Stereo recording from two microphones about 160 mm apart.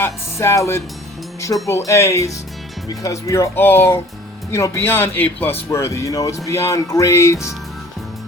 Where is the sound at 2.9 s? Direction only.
20° left (ahead or behind).